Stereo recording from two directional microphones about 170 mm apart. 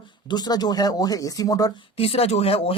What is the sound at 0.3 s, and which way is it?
Speech, 25° left (ahead or behind).